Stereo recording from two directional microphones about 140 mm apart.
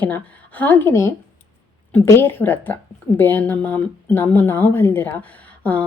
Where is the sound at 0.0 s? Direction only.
10° left (ahead or behind).